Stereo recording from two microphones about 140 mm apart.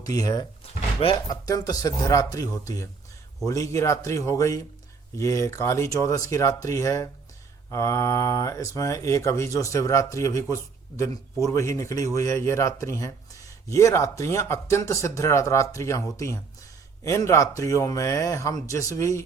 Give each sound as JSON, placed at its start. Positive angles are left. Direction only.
{"t": 0.0, "sound": "speech", "side_deg": 25}
{"t": 0.6, "sound": "drawer open or close", "side_deg": 40}
{"t": 1.3, "sound": "speech", "side_deg": 25}